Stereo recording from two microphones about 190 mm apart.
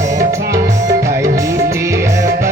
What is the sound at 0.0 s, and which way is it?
Music, 15° right (ahead or behind).